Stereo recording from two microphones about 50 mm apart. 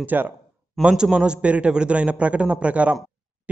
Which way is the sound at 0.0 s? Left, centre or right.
Right.